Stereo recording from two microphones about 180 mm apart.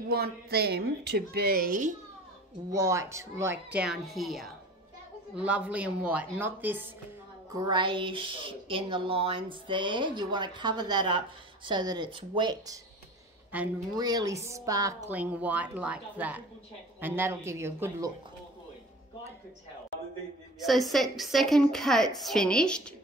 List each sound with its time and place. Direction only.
0.1 s a woman's voice: 60° right (ahead or behind)
2.7 s a woman's voice: 15° right (ahead or behind)
7.5 s speech: 25° right (ahead or behind)
13.5 s a woman's voice: 10° right (ahead or behind)
13.9 s a woman's voice: 20° right (ahead or behind)
20.5 s a woman's voice: centre (ahead or behind)